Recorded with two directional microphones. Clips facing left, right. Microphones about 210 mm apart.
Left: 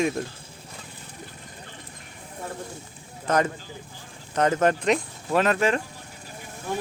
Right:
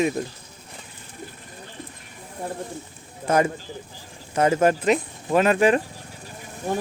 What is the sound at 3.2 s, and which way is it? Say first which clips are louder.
Speech: right 3 dB; 10° right (ahead or behind).